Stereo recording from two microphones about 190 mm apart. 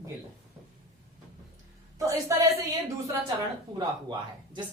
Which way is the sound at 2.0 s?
15° right (ahead or behind).